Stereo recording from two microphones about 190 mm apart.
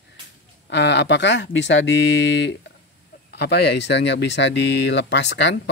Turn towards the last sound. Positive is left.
turn(degrees=70)  # may be behind; listen again after turning